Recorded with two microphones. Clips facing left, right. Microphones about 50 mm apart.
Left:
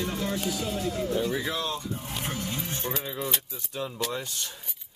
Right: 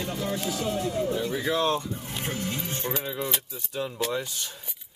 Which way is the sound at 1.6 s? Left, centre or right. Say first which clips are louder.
Right 6 dB; right.